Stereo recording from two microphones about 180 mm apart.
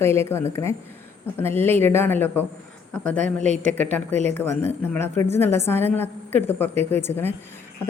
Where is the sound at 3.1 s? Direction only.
40° right (ahead or behind).